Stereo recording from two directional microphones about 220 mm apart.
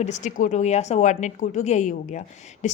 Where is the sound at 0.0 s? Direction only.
35° left (ahead or behind).